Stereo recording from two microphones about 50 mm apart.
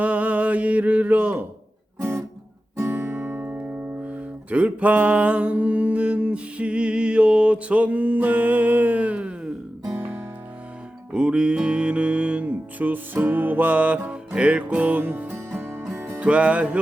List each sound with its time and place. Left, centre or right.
0.0 s mantra: right
2.9 s speech: right
11.1 s music: right
15.3 s music: right
16.2 s music: right